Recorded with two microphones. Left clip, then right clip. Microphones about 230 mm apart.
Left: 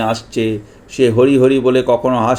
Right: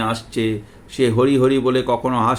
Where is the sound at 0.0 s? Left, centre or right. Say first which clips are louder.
Left 4 dB; centre.